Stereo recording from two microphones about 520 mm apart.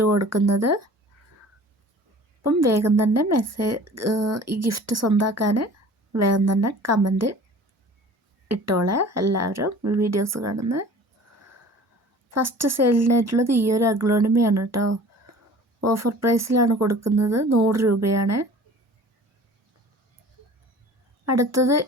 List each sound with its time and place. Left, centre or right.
0.0 s a woman's voice: right
2.4 s a woman's voice: right
8.4 s a woman's voice: right
12.3 s a woman's voice: right
21.2 s a woman's voice: right